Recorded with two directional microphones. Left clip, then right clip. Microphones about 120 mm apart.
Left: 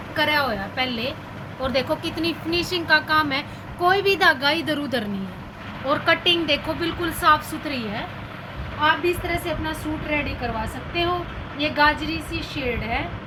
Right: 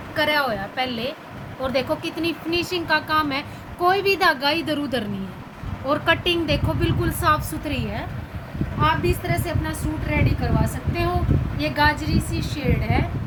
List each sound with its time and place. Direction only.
0.2 s speech: 20° right (ahead or behind)
7.6 s a woman's voice: 40° right (ahead or behind)